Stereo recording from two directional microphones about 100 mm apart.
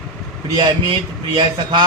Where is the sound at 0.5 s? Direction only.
50° right (ahead or behind).